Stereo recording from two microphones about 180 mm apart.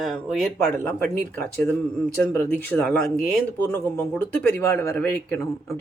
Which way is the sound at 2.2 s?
10° left (ahead or behind).